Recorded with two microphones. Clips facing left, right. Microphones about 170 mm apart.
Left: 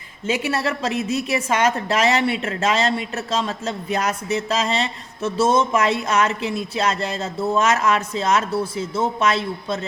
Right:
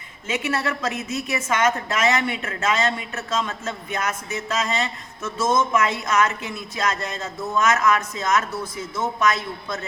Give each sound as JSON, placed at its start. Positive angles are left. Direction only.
{"t": 0.3, "sound": "a woman's voice", "side_deg": 30}